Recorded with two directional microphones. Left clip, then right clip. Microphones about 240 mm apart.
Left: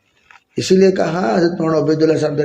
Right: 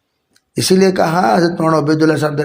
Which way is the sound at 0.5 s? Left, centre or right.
Right.